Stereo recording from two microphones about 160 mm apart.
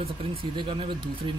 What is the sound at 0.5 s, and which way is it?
Speech, 35° right (ahead or behind).